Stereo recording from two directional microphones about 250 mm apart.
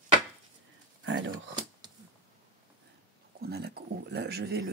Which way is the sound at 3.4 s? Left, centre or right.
Right.